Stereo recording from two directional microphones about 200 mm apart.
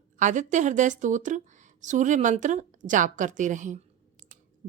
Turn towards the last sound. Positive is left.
turn(degrees=-40)  # may be behind; listen again after turning